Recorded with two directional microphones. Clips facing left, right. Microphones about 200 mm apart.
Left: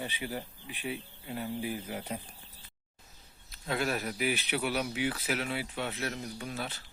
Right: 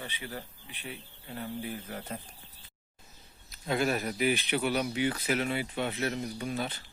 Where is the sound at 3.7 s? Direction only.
Centre (ahead or behind).